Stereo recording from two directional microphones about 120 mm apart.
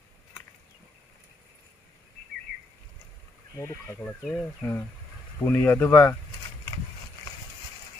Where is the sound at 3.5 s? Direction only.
25° left (ahead or behind).